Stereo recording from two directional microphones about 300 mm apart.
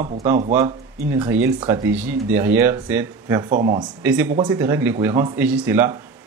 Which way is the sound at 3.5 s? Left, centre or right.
Right.